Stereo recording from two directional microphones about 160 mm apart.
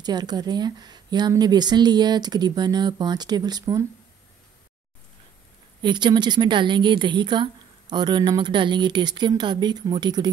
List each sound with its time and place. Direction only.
0.0 s a woman's voice: 25° right (ahead or behind)
5.8 s a woman's voice: 30° right (ahead or behind)